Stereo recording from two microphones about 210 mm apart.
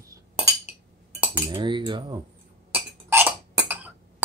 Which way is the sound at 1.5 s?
20° right (ahead or behind).